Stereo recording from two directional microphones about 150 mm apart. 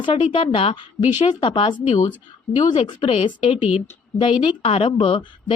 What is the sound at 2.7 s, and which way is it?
Speech, 35° left (ahead or behind).